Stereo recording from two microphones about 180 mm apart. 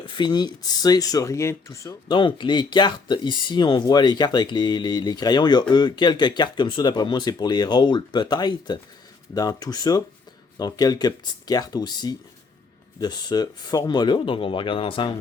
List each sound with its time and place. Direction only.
0.2 s speech: 25° left (ahead or behind)